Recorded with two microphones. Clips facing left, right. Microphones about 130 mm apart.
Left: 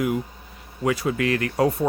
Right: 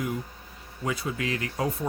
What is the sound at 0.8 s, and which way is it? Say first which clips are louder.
Speech: left 7 dB; 75° left (ahead or behind).